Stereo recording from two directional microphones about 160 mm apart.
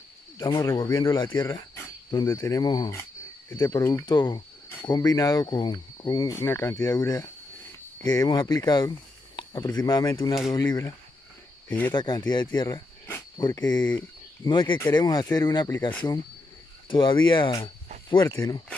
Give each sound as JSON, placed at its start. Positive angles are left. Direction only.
{"t": 0.4, "sound": "speech", "side_deg": 20}
{"t": 16.9, "sound": "speech", "side_deg": 30}